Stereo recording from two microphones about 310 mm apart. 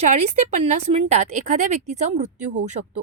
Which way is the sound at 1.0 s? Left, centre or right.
Right.